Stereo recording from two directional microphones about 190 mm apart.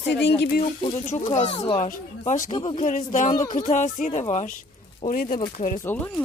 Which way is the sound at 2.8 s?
40° left (ahead or behind).